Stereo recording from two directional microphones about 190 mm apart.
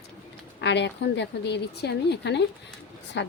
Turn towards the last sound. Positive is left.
turn(degrees=70)  # may be behind; listen again after turning